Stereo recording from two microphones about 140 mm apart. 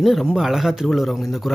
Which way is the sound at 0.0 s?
Centre (ahead or behind).